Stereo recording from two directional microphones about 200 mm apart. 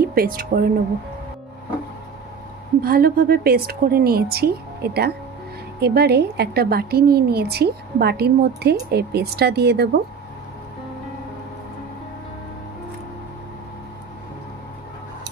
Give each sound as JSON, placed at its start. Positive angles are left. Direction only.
{"t": 0.0, "sound": "speech", "side_deg": -50}
{"t": 2.8, "sound": "a woman's voice", "side_deg": -50}